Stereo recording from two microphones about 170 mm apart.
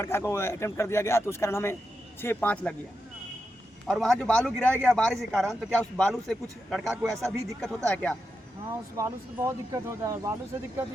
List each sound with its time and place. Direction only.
0.0 s speech: 15° left (ahead or behind)
3.8 s a man's voice: centre (ahead or behind)
8.7 s speech: 15° right (ahead or behind)